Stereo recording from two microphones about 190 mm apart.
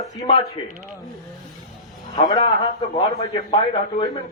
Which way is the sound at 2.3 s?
20° left (ahead or behind).